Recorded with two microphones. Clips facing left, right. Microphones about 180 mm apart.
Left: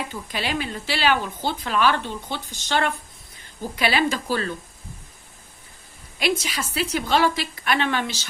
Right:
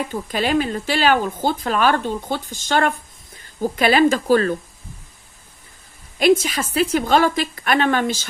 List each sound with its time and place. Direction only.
0.1 s speech: 45° right (ahead or behind)
6.1 s speech: 50° right (ahead or behind)